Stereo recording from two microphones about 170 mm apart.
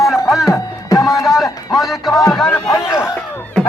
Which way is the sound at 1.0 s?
Centre (ahead or behind).